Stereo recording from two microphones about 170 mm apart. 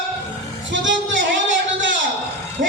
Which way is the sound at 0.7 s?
90° right.